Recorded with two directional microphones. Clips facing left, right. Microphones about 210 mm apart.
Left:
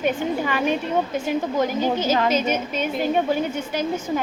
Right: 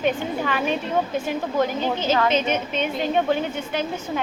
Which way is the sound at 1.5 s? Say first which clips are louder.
Right 1 dB; 10° left (ahead or behind).